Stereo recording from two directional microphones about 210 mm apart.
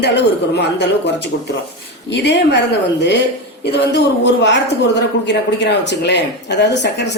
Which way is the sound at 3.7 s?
55° left (ahead or behind).